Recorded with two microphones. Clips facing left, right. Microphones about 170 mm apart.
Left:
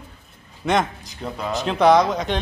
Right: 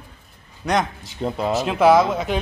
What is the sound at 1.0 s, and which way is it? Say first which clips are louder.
Speech: right 5 dB; 25° right (ahead or behind).